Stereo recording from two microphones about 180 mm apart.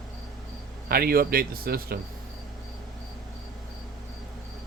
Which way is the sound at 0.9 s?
60° right (ahead or behind).